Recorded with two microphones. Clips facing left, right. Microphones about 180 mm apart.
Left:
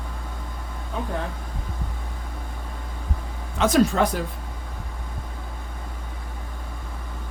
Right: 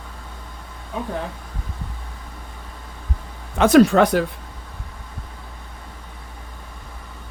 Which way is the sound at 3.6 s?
65° right (ahead or behind).